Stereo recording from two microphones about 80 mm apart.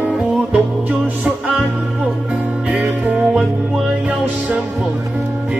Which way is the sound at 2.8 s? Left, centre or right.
Centre.